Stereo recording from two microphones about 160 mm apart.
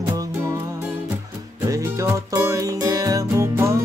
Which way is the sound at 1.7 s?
20° right (ahead or behind).